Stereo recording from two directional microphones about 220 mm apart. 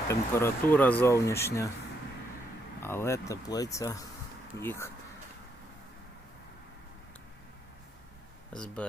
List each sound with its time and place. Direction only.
0.1 s speech: 10° left (ahead or behind)
2.8 s speech: 10° left (ahead or behind)
8.5 s speech: 5° left (ahead or behind)